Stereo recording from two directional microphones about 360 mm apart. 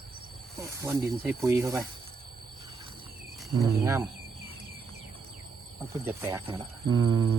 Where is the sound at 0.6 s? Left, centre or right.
Centre.